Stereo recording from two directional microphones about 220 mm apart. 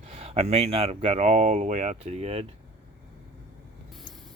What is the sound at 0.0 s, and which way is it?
Speech, 30° right (ahead or behind).